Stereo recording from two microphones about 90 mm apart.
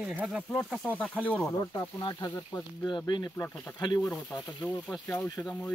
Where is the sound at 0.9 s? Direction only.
15° left (ahead or behind).